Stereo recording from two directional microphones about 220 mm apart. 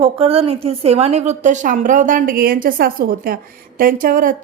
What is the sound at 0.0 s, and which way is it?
A woman's voice, 25° right (ahead or behind).